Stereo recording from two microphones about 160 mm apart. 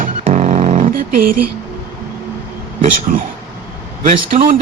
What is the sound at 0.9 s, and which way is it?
Speech, 65° right (ahead or behind).